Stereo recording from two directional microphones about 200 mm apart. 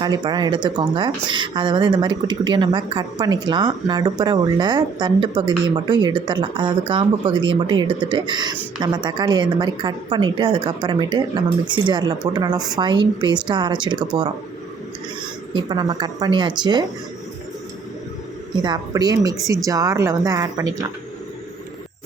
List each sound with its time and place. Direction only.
0.0 s speech: 20° right (ahead or behind)
15.5 s speech: 20° right (ahead or behind)
18.6 s speech: 20° right (ahead or behind)